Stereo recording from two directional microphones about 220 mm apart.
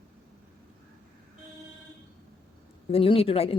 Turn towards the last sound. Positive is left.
turn(degrees=25)  # may be behind; listen again after turning